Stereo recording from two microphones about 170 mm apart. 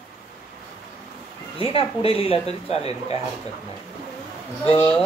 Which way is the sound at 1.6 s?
35° left (ahead or behind).